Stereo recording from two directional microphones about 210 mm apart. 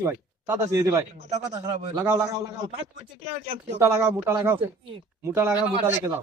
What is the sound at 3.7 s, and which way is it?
A man's voice, 15° right (ahead or behind).